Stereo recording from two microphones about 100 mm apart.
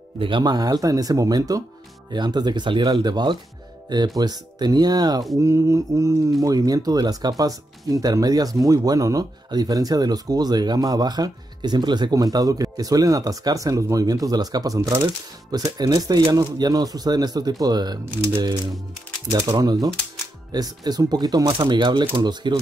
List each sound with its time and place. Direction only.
0.4 s speech: 40° right (ahead or behind)
5.4 s speech: 30° right (ahead or behind); by 22.6 s 45° right (ahead or behind)